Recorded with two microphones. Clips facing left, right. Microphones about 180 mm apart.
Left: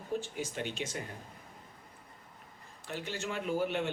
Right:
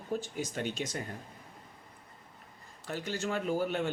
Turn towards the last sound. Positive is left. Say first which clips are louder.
# right 1 dB
turn(degrees=-40)  # may be behind; listen again after turning